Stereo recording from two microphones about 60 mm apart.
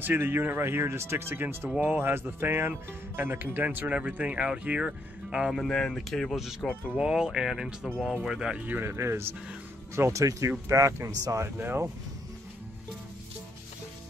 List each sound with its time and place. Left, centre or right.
0.0 s speech: right; by 5.5 s centre
5.7 s speech: centre
8.8 s speech: right
10.1 s speech: right
11.4 s speech: right